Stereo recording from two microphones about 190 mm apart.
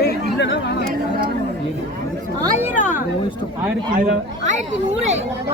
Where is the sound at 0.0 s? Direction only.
65° left (ahead or behind).